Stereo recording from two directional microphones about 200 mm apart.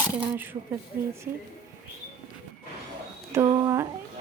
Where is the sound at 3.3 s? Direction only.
15° right (ahead or behind).